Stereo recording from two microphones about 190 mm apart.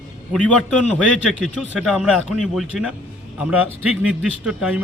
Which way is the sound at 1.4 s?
Centre (ahead or behind).